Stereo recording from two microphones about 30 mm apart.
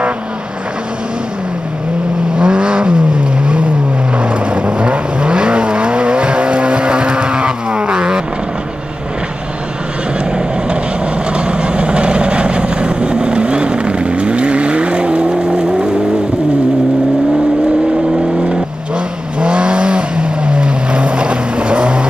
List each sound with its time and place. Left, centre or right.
2.3 s vehicle: right
4.2 s vehicle: right
11.3 s vehicle: right
19.4 s vehicle: right